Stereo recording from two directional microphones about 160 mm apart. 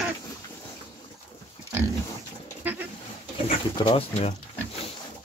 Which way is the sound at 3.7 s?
30° left (ahead or behind).